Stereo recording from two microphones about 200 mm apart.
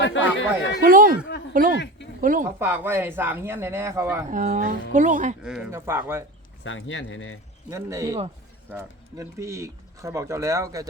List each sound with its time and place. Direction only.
0.0 s speech: 70° left (ahead or behind)
0.8 s speech: 45° right (ahead or behind)
2.0 s a sound: 60° left (ahead or behind)
2.4 s speech: 10° right (ahead or behind)
4.3 s speech: 40° right (ahead or behind)
5.4 s speech: 5° right (ahead or behind)
6.7 s speech: 75° left (ahead or behind)
7.7 s speech: 15° right (ahead or behind)